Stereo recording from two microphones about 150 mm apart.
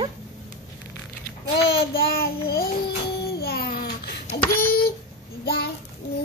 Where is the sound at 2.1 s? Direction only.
90° left.